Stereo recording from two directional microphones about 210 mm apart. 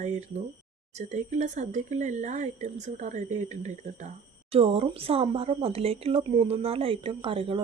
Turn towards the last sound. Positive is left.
turn(degrees=-25)  # may be behind; listen again after turning